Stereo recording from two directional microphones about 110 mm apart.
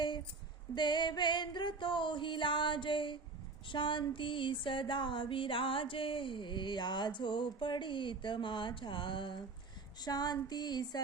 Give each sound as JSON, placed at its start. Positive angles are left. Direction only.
{"t": 0.8, "sound": "music", "side_deg": 45}
{"t": 3.7, "sound": "a sound", "side_deg": 50}
{"t": 10.0, "sound": "female singing", "side_deg": 40}